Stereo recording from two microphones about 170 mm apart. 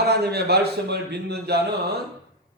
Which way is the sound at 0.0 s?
75° right (ahead or behind).